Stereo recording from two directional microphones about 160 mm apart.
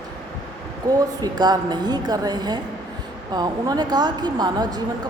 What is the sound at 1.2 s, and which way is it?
A woman's voice, 25° right (ahead or behind).